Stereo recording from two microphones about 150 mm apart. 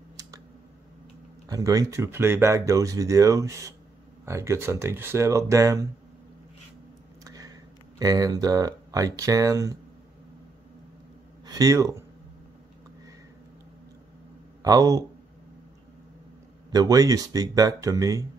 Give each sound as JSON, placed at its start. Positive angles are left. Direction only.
{"t": 1.5, "sound": "speech", "side_deg": -25}
{"t": 7.2, "sound": "a sound", "side_deg": -25}
{"t": 8.0, "sound": "speech", "side_deg": -25}
{"t": 11.4, "sound": "speech", "side_deg": -25}
{"t": 14.6, "sound": "speech", "side_deg": -25}
{"t": 16.7, "sound": "speech", "side_deg": -25}